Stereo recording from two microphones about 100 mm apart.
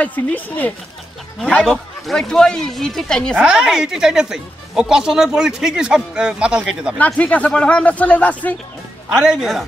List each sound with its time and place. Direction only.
0.0 s speech: 15° left (ahead or behind)
1.6 s speech: centre (ahead or behind)
3.3 s speech: 5° right (ahead or behind)
7.0 s speech: 15° left (ahead or behind)
9.1 s speech: 5° right (ahead or behind)